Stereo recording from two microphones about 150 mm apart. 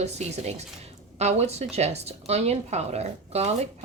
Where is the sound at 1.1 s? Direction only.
45° right (ahead or behind).